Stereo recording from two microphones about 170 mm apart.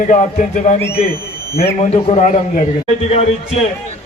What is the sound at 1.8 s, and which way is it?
Speech, 45° left (ahead or behind).